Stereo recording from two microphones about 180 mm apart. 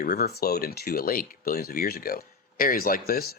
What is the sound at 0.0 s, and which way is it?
Speech, 60° left (ahead or behind).